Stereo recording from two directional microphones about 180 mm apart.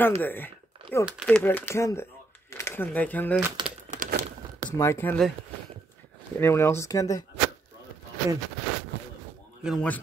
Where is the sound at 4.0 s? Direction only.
55° right (ahead or behind).